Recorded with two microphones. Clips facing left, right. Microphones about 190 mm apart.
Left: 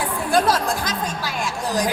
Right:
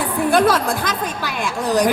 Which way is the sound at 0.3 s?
55° right (ahead or behind).